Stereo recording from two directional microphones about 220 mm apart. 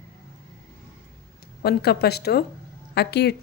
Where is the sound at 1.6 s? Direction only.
45° left (ahead or behind).